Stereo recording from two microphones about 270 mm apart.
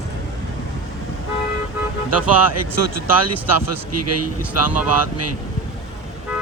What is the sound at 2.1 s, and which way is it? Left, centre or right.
A man's voice, right.